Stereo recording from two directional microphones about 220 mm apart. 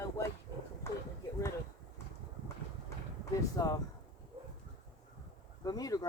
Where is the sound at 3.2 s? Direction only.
15° left (ahead or behind).